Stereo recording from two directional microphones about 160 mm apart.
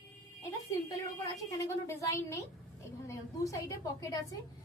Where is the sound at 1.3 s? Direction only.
20° left (ahead or behind).